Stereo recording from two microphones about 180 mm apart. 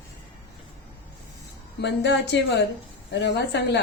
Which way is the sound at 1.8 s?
70° left (ahead or behind).